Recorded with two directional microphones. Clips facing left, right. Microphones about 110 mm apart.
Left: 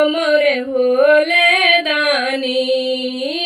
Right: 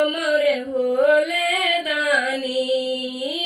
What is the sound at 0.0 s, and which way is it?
Music, 60° left (ahead or behind).